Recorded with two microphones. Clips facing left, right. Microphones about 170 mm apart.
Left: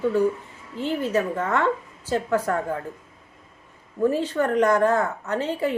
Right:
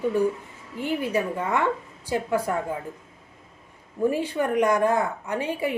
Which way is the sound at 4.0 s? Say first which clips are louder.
Left 2 dB; 10° right (ahead or behind).